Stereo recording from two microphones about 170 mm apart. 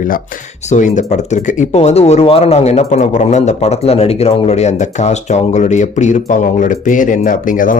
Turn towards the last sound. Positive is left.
turn(degrees=50)  # may be behind; listen again after turning